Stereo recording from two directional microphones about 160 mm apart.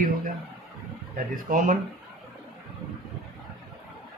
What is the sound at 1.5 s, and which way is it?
Speech, 55° right (ahead or behind).